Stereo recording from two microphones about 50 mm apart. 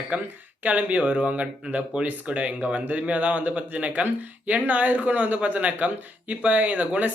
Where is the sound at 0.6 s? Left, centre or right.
Right.